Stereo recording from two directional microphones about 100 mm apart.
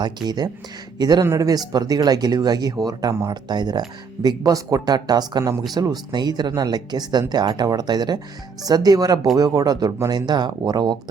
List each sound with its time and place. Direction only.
0.0 s speech: 45° right (ahead or behind)
1.2 s speech: 30° right (ahead or behind)